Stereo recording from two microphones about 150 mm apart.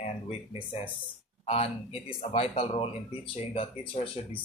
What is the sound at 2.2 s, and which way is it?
Speech, 45° left (ahead or behind).